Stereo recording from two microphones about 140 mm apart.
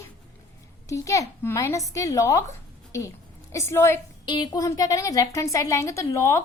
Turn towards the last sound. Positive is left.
turn(degrees=20)  # may be behind; listen again after turning